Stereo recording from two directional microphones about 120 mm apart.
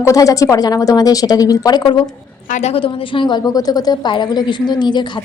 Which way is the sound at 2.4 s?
80° left.